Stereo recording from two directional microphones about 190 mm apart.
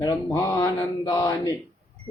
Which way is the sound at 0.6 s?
20° left (ahead or behind).